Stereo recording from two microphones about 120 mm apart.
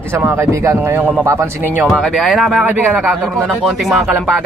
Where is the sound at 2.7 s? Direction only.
15° right (ahead or behind).